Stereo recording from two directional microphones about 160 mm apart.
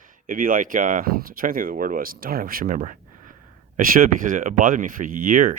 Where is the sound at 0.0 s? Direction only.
60° right (ahead or behind).